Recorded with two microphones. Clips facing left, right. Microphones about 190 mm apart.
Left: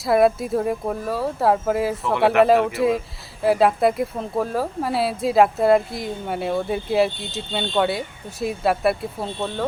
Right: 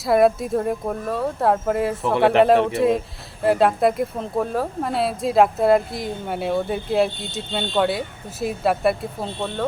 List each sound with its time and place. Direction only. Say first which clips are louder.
0.0 s speech: even; centre (ahead or behind)